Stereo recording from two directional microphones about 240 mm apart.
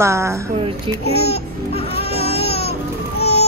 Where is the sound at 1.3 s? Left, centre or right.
Left.